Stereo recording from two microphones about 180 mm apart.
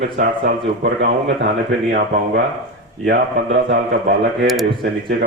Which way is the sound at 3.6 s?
80° right.